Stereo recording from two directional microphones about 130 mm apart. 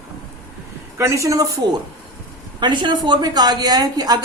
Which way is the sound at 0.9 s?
20° right (ahead or behind).